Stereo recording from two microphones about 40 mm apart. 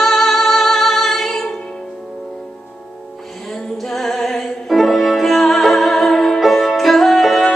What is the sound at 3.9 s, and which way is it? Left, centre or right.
Music, centre.